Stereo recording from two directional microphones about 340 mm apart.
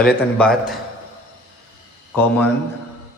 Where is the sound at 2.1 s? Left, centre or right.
Centre.